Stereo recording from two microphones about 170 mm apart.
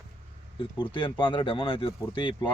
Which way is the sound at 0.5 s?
30° left (ahead or behind).